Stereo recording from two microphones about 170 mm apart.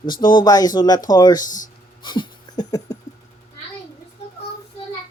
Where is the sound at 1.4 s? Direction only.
50° left (ahead or behind).